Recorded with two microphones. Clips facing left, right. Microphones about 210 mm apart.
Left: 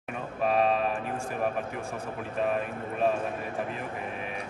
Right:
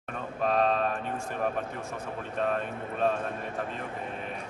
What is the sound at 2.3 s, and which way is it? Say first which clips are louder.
Speech: left 1 dB; 5° left (ahead or behind).